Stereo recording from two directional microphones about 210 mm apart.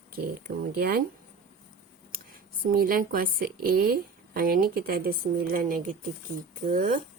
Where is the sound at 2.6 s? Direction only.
45° right (ahead or behind).